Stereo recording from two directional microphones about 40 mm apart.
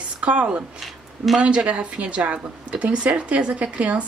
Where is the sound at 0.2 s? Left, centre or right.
Right.